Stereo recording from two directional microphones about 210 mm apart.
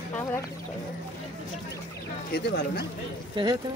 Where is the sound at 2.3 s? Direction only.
50° left (ahead or behind).